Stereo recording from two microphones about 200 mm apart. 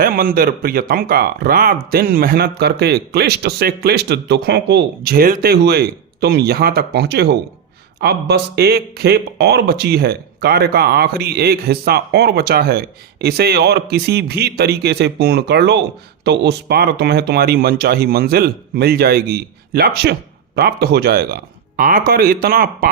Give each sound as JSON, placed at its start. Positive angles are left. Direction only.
{"t": 0.0, "sound": "speech", "side_deg": -45}